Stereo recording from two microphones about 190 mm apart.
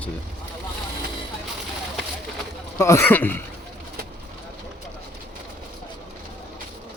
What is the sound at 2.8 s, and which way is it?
Speech, 15° left (ahead or behind).